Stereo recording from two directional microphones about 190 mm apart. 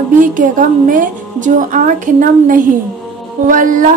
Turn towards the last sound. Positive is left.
turn(degrees=-45)  # may be behind; listen again after turning